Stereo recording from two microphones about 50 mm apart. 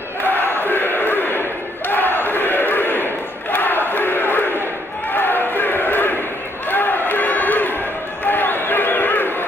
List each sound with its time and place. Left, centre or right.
0.2 s crowd: left
1.9 s battle cry: left
3.5 s crowd: left
6.7 s a sound: left